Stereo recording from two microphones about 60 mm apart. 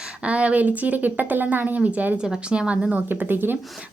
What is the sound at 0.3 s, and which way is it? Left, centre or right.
Speech, right.